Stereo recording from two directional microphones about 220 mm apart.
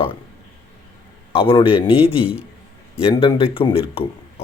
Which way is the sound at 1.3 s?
25° left (ahead or behind).